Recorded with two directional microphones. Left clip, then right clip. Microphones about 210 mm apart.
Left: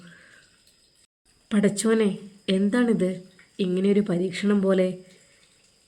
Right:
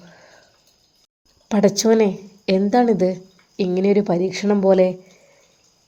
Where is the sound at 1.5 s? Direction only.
10° right (ahead or behind).